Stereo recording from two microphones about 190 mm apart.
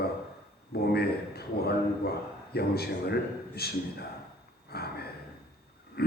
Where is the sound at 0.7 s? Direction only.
55° left (ahead or behind).